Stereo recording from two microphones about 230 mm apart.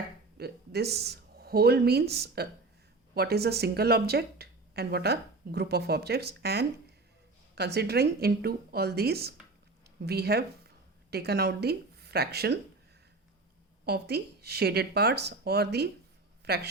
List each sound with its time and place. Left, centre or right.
0.3 s speech: right
13.8 s a woman's voice: right